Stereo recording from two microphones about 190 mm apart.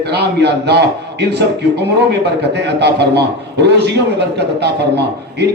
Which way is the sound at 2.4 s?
60° right (ahead or behind).